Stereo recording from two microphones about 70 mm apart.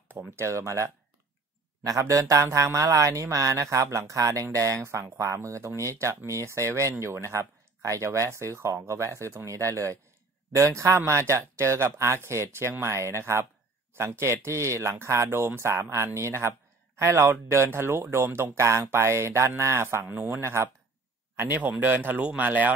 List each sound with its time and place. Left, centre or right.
0.1 s speech: right
21.5 s speech: right